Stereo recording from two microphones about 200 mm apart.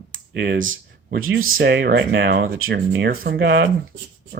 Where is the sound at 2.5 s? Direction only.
75° right (ahead or behind); by 3.6 s 55° right (ahead or behind).